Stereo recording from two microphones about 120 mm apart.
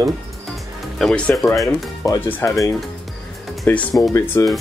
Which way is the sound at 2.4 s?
25° left (ahead or behind).